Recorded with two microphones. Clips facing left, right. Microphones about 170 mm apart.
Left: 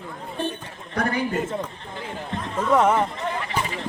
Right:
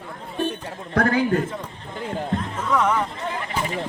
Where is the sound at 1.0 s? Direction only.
65° right (ahead or behind).